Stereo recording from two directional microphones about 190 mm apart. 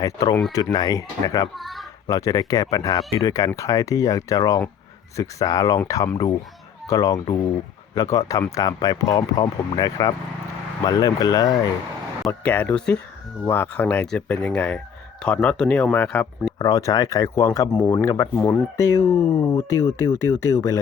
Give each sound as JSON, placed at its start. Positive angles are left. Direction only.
{"t": 0.0, "sound": "speech", "side_deg": 20}
{"t": 1.5, "sound": "speech", "side_deg": 0}
{"t": 2.0, "sound": "speech", "side_deg": 20}
{"t": 16.6, "sound": "speech", "side_deg": 20}